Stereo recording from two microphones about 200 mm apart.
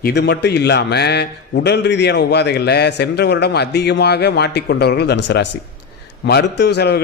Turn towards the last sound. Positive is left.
turn(degrees=55)  # may be behind; listen again after turning